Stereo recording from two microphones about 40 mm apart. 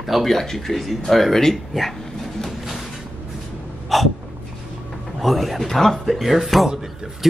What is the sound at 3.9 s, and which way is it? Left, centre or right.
Gasp, centre.